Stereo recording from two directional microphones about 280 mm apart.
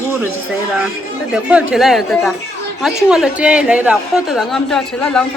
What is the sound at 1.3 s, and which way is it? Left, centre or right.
A woman's voice, centre.